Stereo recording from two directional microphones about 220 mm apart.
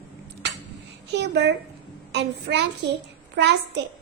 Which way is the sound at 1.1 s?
50° right (ahead or behind).